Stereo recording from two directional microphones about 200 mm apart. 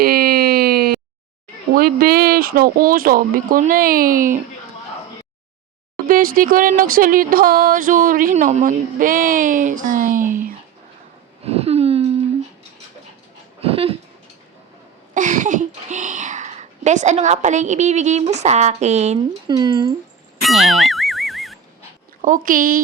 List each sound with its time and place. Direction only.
0.0 s a sound: 50° right (ahead or behind)
1.8 s speech: 50° right (ahead or behind)
6.1 s speech: 45° right (ahead or behind)
11.4 s a sound: 30° right (ahead or behind)
13.6 s a sound: 30° right (ahead or behind)
15.1 s speech: 40° right (ahead or behind)
19.5 s speech: 20° right (ahead or behind)
20.4 s boing: centre (ahead or behind)
22.2 s speech: 40° right (ahead or behind)